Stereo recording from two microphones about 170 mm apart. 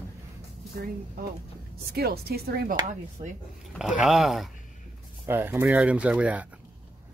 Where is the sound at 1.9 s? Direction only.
65° right (ahead or behind).